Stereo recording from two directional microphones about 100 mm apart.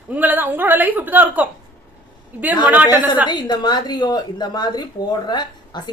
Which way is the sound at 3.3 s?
45° left (ahead or behind).